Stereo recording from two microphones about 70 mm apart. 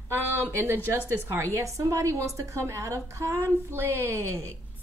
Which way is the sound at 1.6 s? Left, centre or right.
Right.